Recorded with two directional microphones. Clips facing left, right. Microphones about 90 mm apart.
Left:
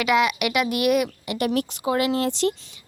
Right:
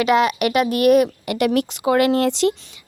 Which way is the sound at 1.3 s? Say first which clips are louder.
Right 5 dB; 75° right (ahead or behind).